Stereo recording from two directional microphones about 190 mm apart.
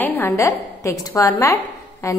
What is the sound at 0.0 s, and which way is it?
A woman's voice, 10° left (ahead or behind).